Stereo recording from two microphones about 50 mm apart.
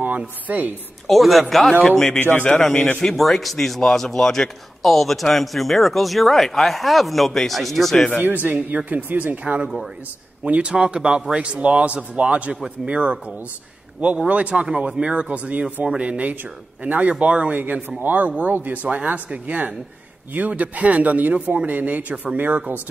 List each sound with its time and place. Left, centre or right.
0.0 s a woman's voice: right
1.0 s a man's voice: centre
8.2 s a man's voice: right
14.2 s a man's voice: right